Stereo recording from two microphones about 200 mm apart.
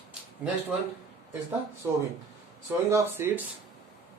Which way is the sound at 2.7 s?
10° right (ahead or behind).